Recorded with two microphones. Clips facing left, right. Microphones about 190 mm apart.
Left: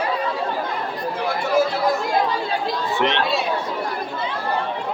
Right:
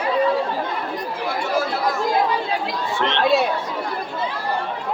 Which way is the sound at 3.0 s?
15° left (ahead or behind).